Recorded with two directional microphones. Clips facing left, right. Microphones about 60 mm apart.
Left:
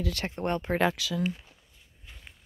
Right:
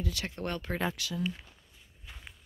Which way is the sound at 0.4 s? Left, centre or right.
Left.